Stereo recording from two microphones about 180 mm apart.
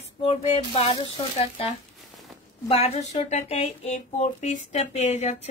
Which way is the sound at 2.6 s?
35° left (ahead or behind).